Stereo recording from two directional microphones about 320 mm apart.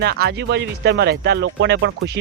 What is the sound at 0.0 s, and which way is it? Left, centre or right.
Speech, right.